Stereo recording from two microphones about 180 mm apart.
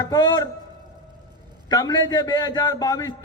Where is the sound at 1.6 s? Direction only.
20° left (ahead or behind).